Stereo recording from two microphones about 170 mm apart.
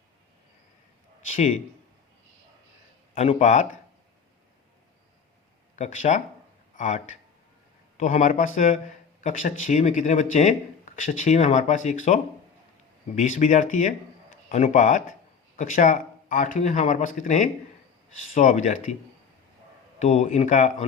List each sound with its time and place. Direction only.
3.2 s speech: 40° left (ahead or behind)
5.7 s speech: 45° left (ahead or behind)
20.0 s speech: 45° left (ahead or behind)